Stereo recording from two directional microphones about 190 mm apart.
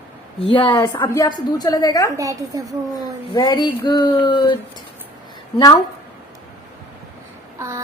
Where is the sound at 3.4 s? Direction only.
20° left (ahead or behind).